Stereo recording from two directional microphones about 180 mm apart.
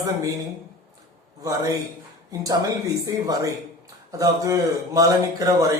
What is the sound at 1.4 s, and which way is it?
A man's voice, 20° right (ahead or behind).